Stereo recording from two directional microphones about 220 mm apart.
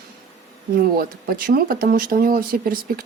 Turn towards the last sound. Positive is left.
turn(degrees=-40)  # may be behind; listen again after turning